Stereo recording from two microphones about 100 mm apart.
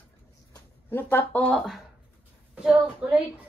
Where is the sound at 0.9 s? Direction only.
20° left (ahead or behind).